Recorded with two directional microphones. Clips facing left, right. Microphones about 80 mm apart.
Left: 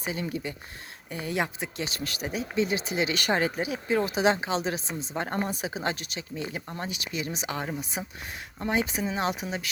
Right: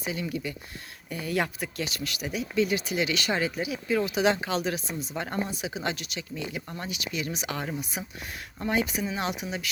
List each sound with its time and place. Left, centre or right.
0.0 s speech: left